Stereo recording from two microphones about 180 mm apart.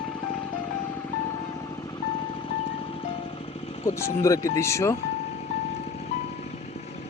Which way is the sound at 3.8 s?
15° left (ahead or behind).